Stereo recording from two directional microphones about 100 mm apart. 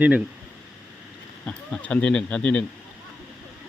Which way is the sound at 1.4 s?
10° left (ahead or behind).